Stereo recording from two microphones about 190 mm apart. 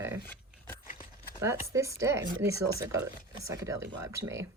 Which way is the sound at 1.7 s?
15° right (ahead or behind).